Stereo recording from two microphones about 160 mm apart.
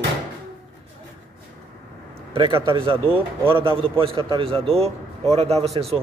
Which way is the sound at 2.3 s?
35° right (ahead or behind).